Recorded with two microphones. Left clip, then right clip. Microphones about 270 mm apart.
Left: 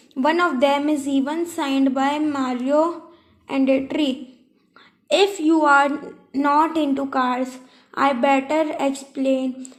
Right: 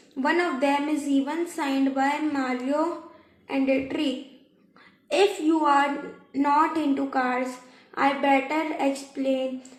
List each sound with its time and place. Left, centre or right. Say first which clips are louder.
0.2 s a woman's voice: left 6 dB; left